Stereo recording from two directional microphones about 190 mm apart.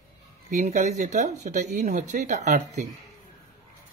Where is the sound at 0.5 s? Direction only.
40° right (ahead or behind).